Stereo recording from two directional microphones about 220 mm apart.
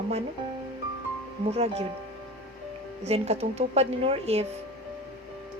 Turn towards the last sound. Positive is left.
turn(degrees=-25)  # may be behind; listen again after turning